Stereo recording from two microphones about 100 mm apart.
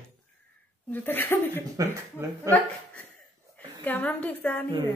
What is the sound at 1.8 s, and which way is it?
Speech, 35° right (ahead or behind).